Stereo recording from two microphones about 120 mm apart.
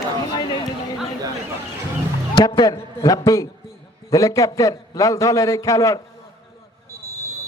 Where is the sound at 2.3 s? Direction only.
40° left (ahead or behind).